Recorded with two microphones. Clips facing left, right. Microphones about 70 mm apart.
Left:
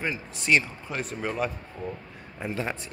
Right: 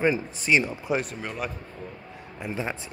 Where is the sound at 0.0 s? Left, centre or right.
Centre.